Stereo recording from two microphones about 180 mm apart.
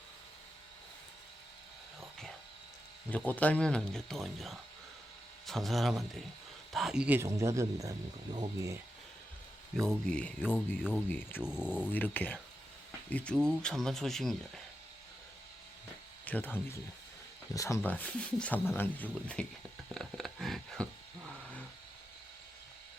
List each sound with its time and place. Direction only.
3.1 s speech: 10° left (ahead or behind); by 8.8 s 20° right (ahead or behind)
9.7 s speech: 5° left (ahead or behind)
16.2 s speech: 10° left (ahead or behind)
19.9 s a sound: centre (ahead or behind)